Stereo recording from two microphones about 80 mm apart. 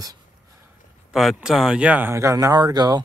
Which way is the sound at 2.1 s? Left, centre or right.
Right.